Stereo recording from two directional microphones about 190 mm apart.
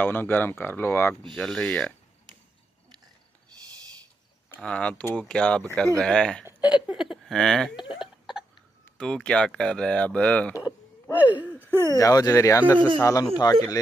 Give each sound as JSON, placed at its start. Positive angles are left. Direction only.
{"t": 0.0, "sound": "speech", "side_deg": 10}
{"t": 1.3, "sound": "speech", "side_deg": 0}
{"t": 4.5, "sound": "speech", "side_deg": 5}
{"t": 7.9, "sound": "a sound", "side_deg": 0}
{"t": 8.8, "sound": "speech", "side_deg": 5}
{"t": 11.1, "sound": "a sound", "side_deg": -10}
{"t": 11.9, "sound": "speech", "side_deg": 20}
{"t": 13.1, "sound": "speech", "side_deg": 20}